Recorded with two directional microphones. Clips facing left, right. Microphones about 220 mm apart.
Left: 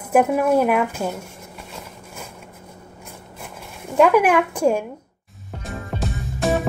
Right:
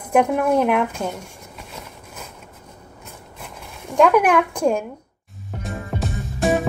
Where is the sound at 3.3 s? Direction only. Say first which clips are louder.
Left 1 dB; 5° left (ahead or behind).